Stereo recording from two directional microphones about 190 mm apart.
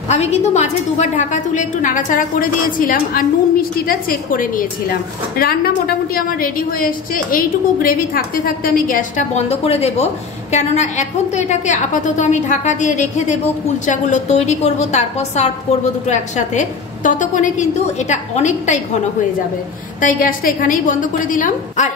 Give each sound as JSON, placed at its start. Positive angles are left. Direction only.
{"t": 0.1, "sound": "a woman's voice", "side_deg": 35}
{"t": 20.0, "sound": "a woman's voice", "side_deg": 45}